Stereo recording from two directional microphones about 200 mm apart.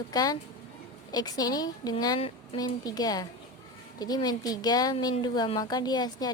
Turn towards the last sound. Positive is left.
turn(degrees=20)  # may be behind; listen again after turning